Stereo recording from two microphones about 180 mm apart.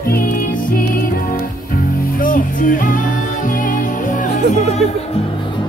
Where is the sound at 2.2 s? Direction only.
50° left (ahead or behind).